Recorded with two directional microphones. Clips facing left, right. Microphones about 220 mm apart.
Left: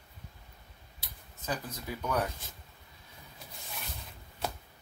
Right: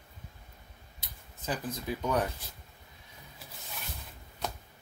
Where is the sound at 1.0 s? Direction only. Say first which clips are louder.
Right 2 dB; 20° right (ahead or behind).